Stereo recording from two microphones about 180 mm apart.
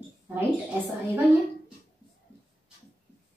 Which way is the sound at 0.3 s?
10° right (ahead or behind).